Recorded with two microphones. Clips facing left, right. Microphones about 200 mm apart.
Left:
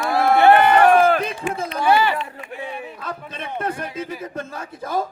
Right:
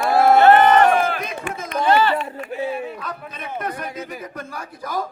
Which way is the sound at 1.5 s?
60° right (ahead or behind).